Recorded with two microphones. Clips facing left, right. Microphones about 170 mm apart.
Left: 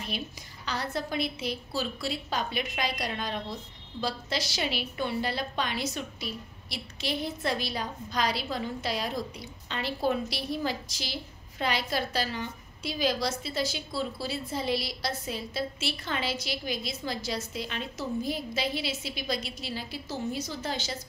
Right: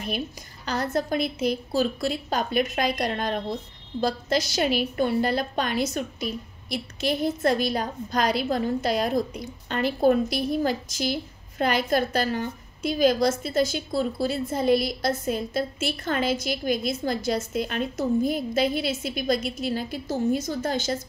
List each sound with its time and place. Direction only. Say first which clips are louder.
0.7 s a woman's voice: right 7 dB; 45° right (ahead or behind)